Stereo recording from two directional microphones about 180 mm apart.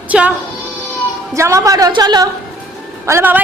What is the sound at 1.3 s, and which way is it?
A woman's voice, 15° right (ahead or behind).